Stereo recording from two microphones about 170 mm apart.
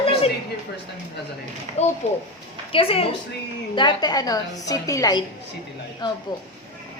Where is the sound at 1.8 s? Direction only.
40° left (ahead or behind); by 5.2 s 20° left (ahead or behind).